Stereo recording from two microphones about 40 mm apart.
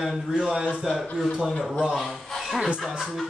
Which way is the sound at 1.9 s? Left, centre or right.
Centre.